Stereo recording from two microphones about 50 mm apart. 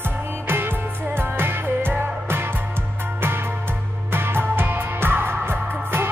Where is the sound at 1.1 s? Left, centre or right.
Right.